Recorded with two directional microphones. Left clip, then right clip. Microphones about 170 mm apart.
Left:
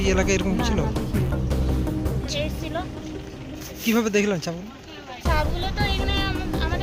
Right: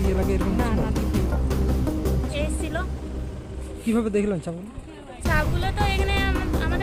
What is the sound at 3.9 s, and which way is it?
Speech, centre (ahead or behind).